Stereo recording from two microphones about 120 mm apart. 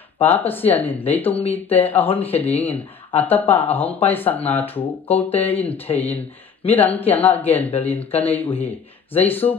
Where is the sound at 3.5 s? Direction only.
15° left (ahead or behind).